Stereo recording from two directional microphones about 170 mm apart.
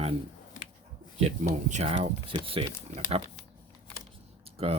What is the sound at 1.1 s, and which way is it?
Speech, 40° right (ahead or behind).